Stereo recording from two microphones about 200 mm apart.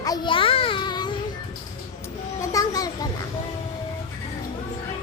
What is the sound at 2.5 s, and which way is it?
Children playing, 20° left (ahead or behind).